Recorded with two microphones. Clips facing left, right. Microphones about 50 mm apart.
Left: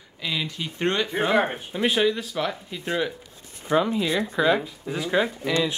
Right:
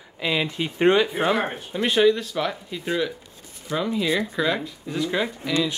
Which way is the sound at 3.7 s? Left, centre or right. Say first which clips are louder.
Left 5 dB; left.